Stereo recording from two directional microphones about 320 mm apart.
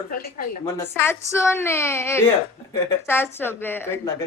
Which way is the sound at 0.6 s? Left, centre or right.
Centre.